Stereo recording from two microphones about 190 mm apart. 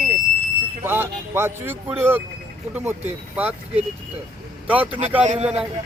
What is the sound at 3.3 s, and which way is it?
Speech, 10° right (ahead or behind).